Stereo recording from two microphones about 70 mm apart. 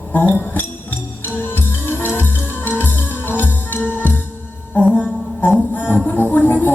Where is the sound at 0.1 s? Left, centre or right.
Left.